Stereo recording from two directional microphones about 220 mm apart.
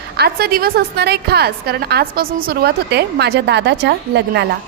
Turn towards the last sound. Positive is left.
turn(degrees=-50)  # may be behind; listen again after turning